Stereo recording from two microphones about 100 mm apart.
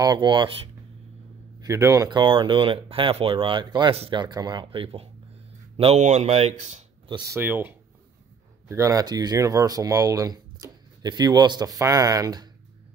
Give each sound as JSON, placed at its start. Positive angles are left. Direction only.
{"t": 0.0, "sound": "speech", "side_deg": -50}
{"t": 1.6, "sound": "speech", "side_deg": -30}
{"t": 2.0, "sound": "speech", "side_deg": -50}
{"t": 4.6, "sound": "speech", "side_deg": -75}
{"t": 7.3, "sound": "speech", "side_deg": -20}
{"t": 8.6, "sound": "speech", "side_deg": -30}